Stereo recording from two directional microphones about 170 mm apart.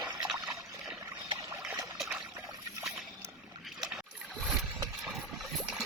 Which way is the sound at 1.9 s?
5° right (ahead or behind).